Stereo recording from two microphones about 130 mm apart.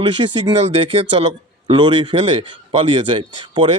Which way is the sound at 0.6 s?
50° right (ahead or behind).